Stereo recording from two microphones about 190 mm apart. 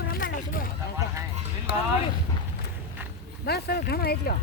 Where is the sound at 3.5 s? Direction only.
55° left (ahead or behind).